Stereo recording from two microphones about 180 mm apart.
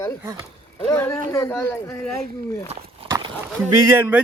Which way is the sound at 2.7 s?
35° right (ahead or behind).